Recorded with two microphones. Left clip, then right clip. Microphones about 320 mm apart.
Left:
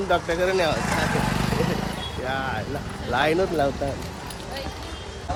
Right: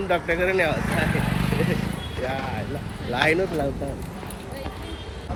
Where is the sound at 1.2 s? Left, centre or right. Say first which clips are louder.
Left 2 dB; left.